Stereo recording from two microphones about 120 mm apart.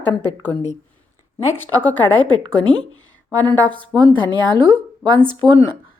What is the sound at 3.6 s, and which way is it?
Speech, 10° left (ahead or behind).